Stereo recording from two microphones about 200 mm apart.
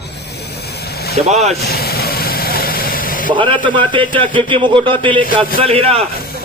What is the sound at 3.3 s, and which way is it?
A man's voice, 25° right (ahead or behind).